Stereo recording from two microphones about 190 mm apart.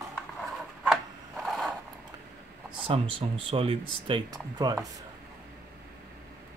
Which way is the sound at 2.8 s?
30° right (ahead or behind).